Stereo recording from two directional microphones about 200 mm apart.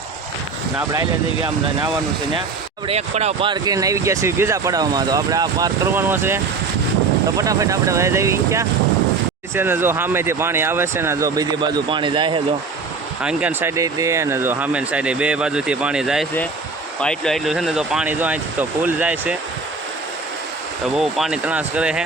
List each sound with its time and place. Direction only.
0.9 s speech: 20° right (ahead or behind)
2.8 s speech: 30° right (ahead or behind)
13.2 s speech: 10° right (ahead or behind)
20.9 s speech: 5° right (ahead or behind)